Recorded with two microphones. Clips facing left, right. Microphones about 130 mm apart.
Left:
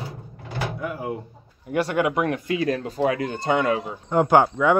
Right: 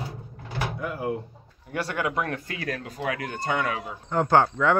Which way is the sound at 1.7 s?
20° left (ahead or behind).